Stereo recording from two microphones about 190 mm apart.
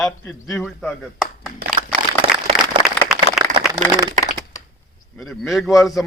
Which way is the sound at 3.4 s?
20° right (ahead or behind).